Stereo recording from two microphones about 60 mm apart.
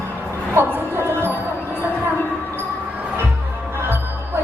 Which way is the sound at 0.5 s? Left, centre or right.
Right.